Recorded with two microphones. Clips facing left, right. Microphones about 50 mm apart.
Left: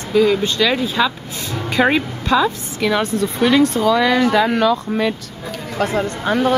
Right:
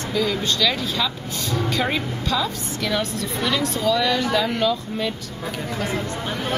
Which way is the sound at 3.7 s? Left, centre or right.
Left.